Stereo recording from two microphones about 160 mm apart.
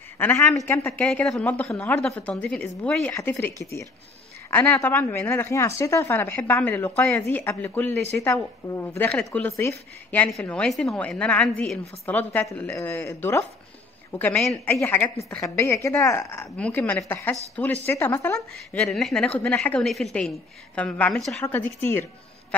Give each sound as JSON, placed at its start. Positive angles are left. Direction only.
{"t": 0.2, "sound": "a woman's voice", "side_deg": 10}